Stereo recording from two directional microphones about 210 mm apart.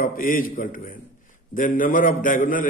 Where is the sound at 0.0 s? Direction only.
40° left (ahead or behind).